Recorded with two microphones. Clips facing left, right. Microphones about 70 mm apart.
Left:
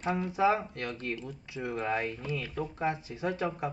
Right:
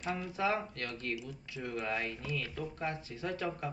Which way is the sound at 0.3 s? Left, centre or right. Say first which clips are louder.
Left 7 dB; left.